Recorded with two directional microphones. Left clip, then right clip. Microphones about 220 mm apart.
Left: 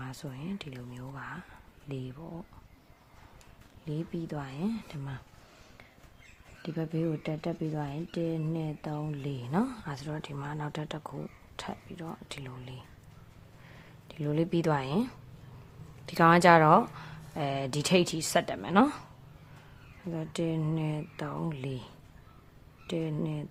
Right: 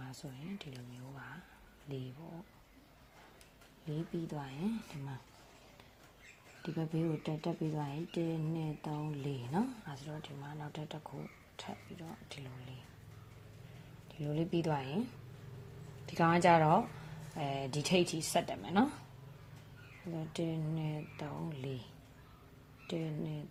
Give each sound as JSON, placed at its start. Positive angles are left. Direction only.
{"t": 0.0, "sound": "speech", "side_deg": 25}
{"t": 3.8, "sound": "speech", "side_deg": 25}
{"t": 6.6, "sound": "speech", "side_deg": 20}
{"t": 14.1, "sound": "speech", "side_deg": 25}
{"t": 16.0, "sound": "speech", "side_deg": 20}
{"t": 20.1, "sound": "speech", "side_deg": 20}
{"t": 22.9, "sound": "speech", "side_deg": 20}